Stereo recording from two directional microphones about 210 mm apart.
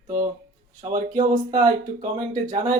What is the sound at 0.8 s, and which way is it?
Speech, 35° right (ahead or behind).